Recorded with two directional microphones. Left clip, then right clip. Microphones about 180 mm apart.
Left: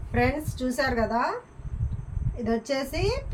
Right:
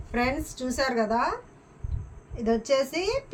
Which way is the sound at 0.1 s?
45° right (ahead or behind).